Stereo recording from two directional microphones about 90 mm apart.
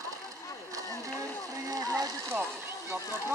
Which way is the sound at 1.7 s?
40° right (ahead or behind).